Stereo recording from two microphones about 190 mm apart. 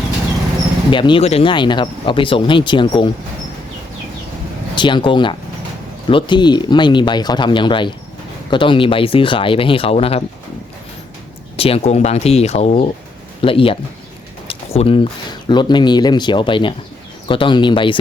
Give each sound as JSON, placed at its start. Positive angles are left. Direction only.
{"t": 0.9, "sound": "speech", "side_deg": 25}
{"t": 4.7, "sound": "speech", "side_deg": 25}
{"t": 11.5, "sound": "speech", "side_deg": 30}